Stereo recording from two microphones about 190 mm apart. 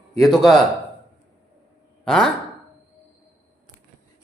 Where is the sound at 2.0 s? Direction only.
5° left (ahead or behind).